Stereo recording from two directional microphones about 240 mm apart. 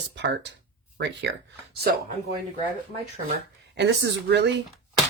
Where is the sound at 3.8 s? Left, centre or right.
Right.